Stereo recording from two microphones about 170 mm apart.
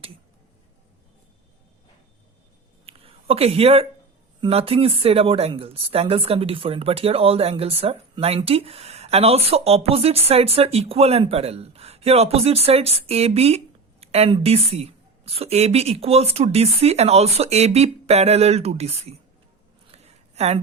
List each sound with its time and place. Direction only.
2.8 s a sound: 35° right (ahead or behind)
4.4 s speech: 35° right (ahead or behind)
20.3 s speech: 40° right (ahead or behind)